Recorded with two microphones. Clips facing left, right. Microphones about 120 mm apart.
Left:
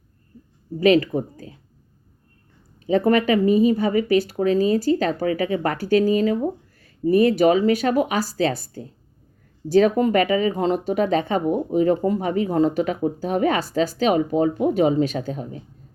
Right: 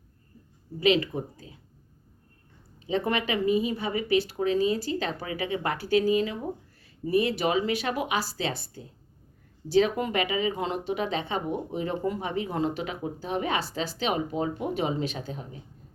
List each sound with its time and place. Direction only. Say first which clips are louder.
0.8 s speech: left 7 dB; 45° left (ahead or behind)
2.8 s speech: left 9 dB; 40° left (ahead or behind)